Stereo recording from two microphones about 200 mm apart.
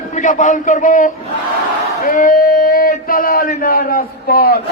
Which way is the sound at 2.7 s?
45° left (ahead or behind).